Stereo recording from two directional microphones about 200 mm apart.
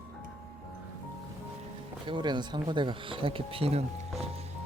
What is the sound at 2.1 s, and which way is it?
Speech, 20° right (ahead or behind).